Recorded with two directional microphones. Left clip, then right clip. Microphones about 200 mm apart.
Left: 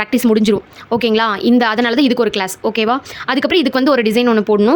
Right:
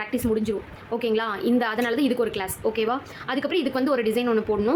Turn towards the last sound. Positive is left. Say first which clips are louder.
# left 10 dB
turn(degrees=50)  # may be behind; listen again after turning